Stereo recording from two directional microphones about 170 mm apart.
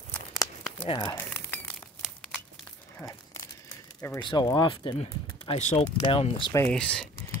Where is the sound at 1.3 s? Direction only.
10° left (ahead or behind).